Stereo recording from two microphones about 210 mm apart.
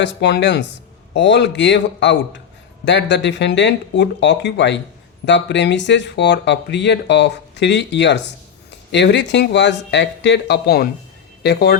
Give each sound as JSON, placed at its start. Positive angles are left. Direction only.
{"t": 0.0, "sound": "speech", "side_deg": 55}